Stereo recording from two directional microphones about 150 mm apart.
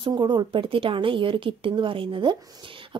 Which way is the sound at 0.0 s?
30° right (ahead or behind).